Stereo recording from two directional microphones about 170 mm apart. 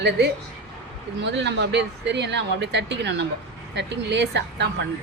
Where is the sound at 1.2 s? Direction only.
90° right.